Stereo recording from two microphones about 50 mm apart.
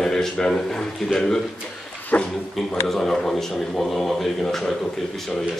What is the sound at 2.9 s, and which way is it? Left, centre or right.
Speech, centre.